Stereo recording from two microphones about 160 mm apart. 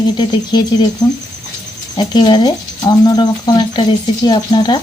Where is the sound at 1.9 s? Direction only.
30° left (ahead or behind).